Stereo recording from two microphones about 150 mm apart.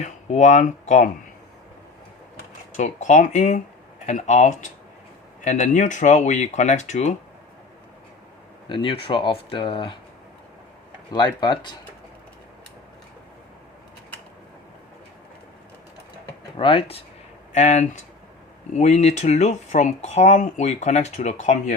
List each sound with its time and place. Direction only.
0.0 s speech: 50° left (ahead or behind)
2.7 s speech: 55° left (ahead or behind)
8.7 s speech: 35° left (ahead or behind)
11.1 s speech: 30° left (ahead or behind)
16.6 s speech: 35° left (ahead or behind)
17.5 s speech: 50° left (ahead or behind)